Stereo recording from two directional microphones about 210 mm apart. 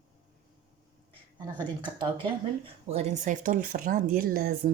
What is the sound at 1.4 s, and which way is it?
Speech, 20° right (ahead or behind).